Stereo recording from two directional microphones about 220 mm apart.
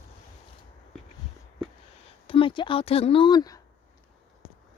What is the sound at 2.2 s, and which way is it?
A woman's voice, 25° left (ahead or behind).